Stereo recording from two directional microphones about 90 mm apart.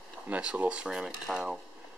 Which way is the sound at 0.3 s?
15° right (ahead or behind).